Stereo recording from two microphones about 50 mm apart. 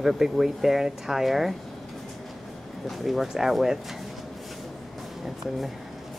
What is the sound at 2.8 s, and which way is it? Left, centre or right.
Speech, centre.